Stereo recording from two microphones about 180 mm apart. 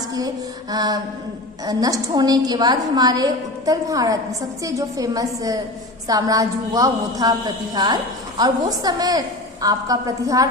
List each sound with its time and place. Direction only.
0.0 s female singing: 20° right (ahead or behind)
0.7 s a woman's voice: 20° right (ahead or behind)